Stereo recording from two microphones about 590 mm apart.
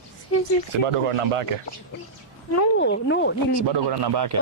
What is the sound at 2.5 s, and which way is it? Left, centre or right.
Speech, left.